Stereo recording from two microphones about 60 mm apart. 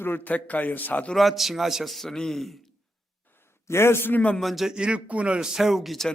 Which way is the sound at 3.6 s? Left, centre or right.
Left.